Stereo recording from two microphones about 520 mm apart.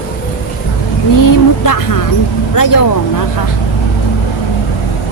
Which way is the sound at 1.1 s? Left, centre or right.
Left.